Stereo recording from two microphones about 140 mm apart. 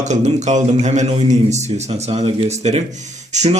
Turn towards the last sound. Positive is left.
turn(degrees=-55)  # may be behind; listen again after turning